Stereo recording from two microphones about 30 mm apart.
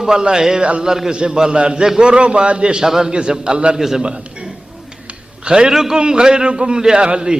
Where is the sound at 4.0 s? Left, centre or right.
Right.